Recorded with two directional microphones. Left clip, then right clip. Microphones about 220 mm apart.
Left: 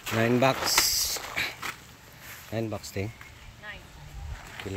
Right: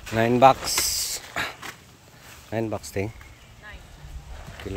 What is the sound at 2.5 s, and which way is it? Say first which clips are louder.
Throat clearing: right 5 dB; 10° right (ahead or behind).